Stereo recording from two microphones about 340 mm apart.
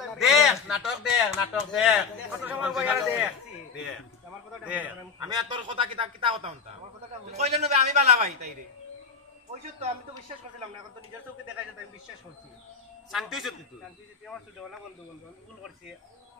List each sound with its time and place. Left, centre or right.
0.0 s a man's voice: centre
13.1 s speech: centre